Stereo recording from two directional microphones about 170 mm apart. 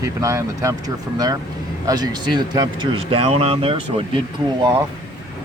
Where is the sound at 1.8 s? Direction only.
20° right (ahead or behind).